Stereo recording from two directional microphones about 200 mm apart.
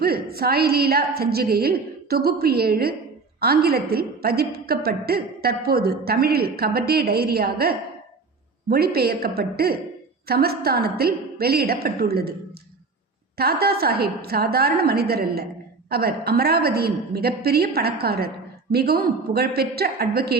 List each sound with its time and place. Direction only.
0.0 s a woman's voice: 50° right (ahead or behind)
13.3 s a woman's voice: 50° right (ahead or behind)